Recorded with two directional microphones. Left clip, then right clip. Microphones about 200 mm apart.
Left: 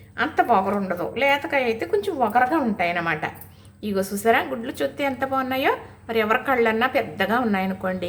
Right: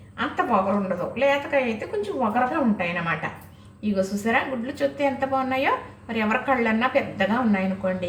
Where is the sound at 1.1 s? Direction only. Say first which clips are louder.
Left 1 dB; 20° left (ahead or behind).